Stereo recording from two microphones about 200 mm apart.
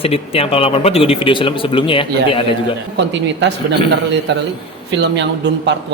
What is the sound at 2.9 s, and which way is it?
Speech, 60° right (ahead or behind).